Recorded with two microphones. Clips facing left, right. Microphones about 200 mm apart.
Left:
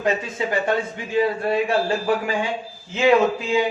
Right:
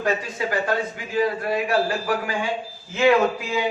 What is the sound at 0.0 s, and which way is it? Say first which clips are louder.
A man's voice: left 1 dB; 25° left (ahead or behind).